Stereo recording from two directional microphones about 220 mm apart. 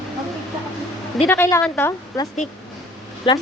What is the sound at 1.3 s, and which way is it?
A woman's voice, 10° left (ahead or behind).